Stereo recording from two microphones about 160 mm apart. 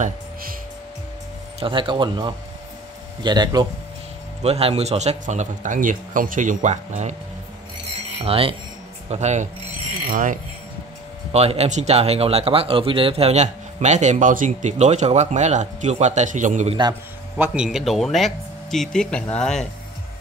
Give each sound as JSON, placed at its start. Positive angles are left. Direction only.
{"t": 1.6, "sound": "speech", "side_deg": -30}
{"t": 4.4, "sound": "speech", "side_deg": -40}
{"t": 8.2, "sound": "speech", "side_deg": -35}
{"t": 9.1, "sound": "speech", "side_deg": -45}
{"t": 10.0, "sound": "speech", "side_deg": -60}
{"t": 11.3, "sound": "speech", "side_deg": -40}
{"t": 17.4, "sound": "speech", "side_deg": -5}